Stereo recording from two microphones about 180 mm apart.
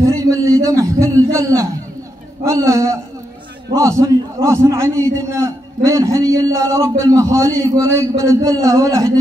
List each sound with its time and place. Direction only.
0.0 s a man's voice: 20° right (ahead or behind)
4.4 s a man's voice: 15° right (ahead or behind)